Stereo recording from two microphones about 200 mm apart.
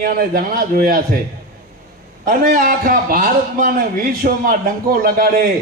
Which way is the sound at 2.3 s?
45° right (ahead or behind).